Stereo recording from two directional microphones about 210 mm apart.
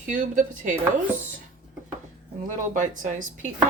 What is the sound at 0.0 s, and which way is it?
Speech, 35° right (ahead or behind).